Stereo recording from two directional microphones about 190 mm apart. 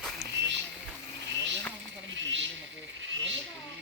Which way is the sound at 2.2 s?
75° right (ahead or behind).